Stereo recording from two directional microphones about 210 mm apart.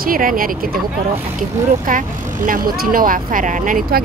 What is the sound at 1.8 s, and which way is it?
Speech, 40° right (ahead or behind).